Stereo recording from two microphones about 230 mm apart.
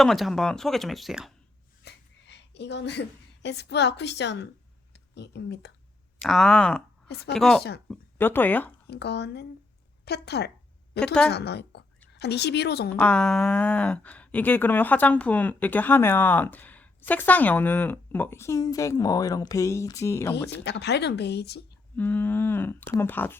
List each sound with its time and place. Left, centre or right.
0.0 s speech: centre
1.8 s a woman's voice: left
6.1 s speech: centre
8.9 s speech: left
11.0 s speech: centre
11.3 s speech: left
12.9 s speech: centre
20.7 s speech: left
21.9 s speech: centre